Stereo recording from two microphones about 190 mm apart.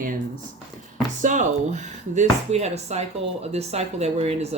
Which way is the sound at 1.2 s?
40° right (ahead or behind).